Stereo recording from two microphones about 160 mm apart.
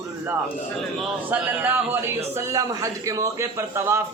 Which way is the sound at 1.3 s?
10° right (ahead or behind).